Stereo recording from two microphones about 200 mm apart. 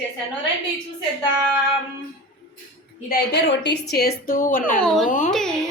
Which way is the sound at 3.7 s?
50° left (ahead or behind).